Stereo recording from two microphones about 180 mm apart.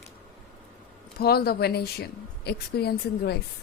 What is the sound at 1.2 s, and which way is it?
Speech, 60° left (ahead or behind).